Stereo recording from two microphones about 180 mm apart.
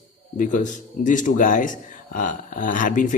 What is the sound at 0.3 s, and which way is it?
Speech, 45° left (ahead or behind).